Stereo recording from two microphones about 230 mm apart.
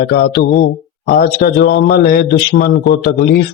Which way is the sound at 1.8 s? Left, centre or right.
Left.